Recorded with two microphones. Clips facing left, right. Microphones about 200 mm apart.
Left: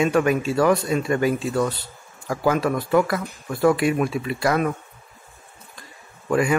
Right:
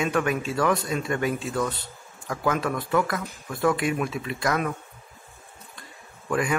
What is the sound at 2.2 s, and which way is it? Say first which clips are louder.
Speech: left 5 dB; 25° left (ahead or behind).